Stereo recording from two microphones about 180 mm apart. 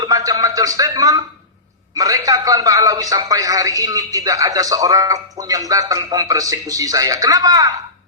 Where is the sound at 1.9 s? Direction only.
20° right (ahead or behind).